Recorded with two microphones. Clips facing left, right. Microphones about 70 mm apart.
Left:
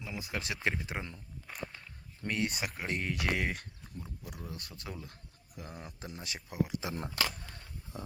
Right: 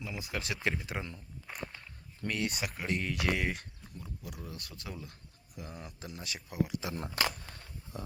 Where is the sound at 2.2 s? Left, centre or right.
Left.